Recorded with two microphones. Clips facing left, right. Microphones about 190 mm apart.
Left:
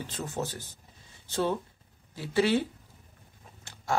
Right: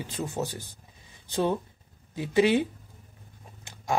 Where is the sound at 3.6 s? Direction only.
15° right (ahead or behind).